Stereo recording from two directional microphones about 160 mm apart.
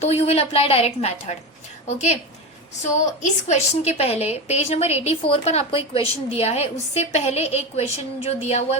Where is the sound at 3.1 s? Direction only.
45° left (ahead or behind).